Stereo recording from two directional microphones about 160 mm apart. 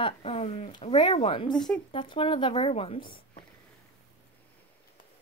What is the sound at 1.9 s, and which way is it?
Speech, 30° left (ahead or behind).